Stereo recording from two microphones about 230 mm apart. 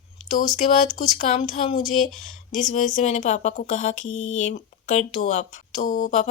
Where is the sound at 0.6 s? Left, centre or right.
Left.